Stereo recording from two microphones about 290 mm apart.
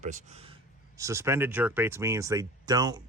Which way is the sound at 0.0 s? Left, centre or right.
Right.